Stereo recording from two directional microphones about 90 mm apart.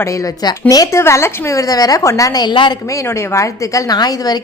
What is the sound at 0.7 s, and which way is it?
Speech, 45° left (ahead or behind).